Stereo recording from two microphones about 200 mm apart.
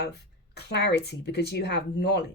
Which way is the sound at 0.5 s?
55° left (ahead or behind).